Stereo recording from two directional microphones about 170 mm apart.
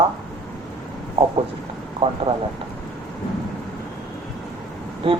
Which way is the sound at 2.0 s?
30° right (ahead or behind).